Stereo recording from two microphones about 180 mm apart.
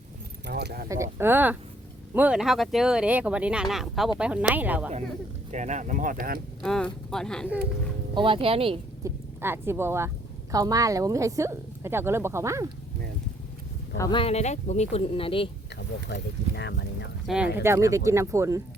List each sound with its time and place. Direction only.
0.4 s speech: 65° right (ahead or behind)
0.9 s a woman's voice: 15° right (ahead or behind)
5.5 s speech: 40° right (ahead or behind)
6.6 s speech: 5° left (ahead or behind)
8.1 s speech: 30° right (ahead or behind)
9.0 s a woman's voice: 15° right (ahead or behind)
13.9 s speech: 15° left (ahead or behind)
14.2 s speech: 35° left (ahead or behind)
16.1 s speech: 75° left (ahead or behind)
17.2 s speech: 5° right (ahead or behind)
17.6 s a woman's voice: 15° right (ahead or behind)